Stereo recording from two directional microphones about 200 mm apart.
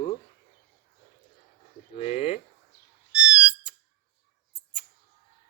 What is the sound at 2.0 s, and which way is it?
Speech, 30° left (ahead or behind).